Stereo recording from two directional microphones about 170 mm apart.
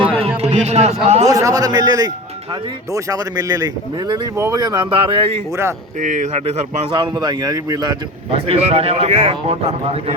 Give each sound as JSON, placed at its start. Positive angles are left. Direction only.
{"t": 0.2, "sound": "a sound", "side_deg": -35}
{"t": 1.0, "sound": "a man's voice", "side_deg": -40}
{"t": 1.3, "sound": "speech", "side_deg": -20}
{"t": 6.0, "sound": "speech", "side_deg": -50}
{"t": 8.3, "sound": "a man's voice", "side_deg": -35}